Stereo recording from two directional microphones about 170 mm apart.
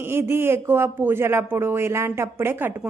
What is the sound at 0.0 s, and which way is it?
Speech, 15° right (ahead or behind).